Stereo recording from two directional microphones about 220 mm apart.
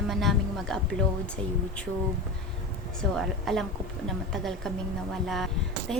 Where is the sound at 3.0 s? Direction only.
Centre (ahead or behind).